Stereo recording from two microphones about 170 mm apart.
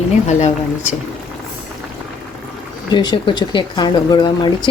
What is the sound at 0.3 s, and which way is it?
Speech, 40° left (ahead or behind).